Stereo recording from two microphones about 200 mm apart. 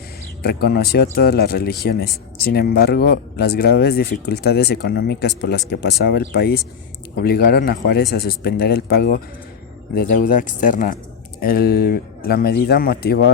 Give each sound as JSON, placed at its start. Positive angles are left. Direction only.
{"t": 0.4, "sound": "speech", "side_deg": 50}